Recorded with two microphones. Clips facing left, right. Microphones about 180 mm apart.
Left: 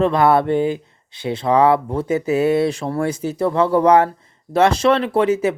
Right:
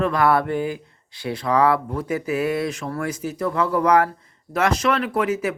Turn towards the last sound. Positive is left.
turn(degrees=25)  # may be behind; listen again after turning